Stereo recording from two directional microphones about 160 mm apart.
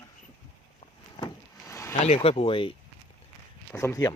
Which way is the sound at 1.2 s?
20° left (ahead or behind).